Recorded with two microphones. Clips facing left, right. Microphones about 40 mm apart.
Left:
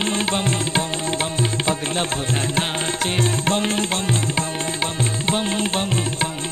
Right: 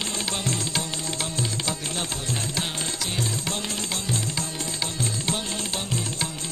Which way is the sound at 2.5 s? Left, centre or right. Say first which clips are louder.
Left 7 dB; left.